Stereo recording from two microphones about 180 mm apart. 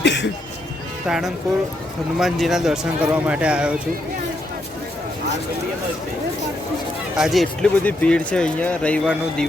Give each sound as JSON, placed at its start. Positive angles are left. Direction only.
{"t": 0.0, "sound": "music", "side_deg": 75}
{"t": 1.0, "sound": "speech", "side_deg": -5}
{"t": 7.2, "sound": "speech", "side_deg": 0}